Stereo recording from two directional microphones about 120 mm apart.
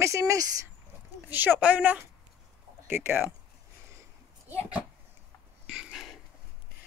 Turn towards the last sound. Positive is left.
turn(degrees=-5)  # may be behind; listen again after turning